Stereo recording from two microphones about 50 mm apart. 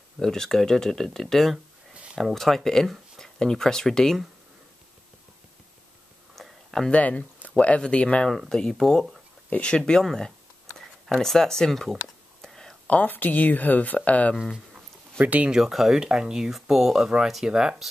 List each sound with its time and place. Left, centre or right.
0.2 s speech: centre
6.3 s a sound: centre
6.9 s speech: left
8.5 s speech: centre
9.5 s speech: left
12.4 s whispering: centre
12.8 s speech: left
15.2 s speech: right
15.5 s speech: centre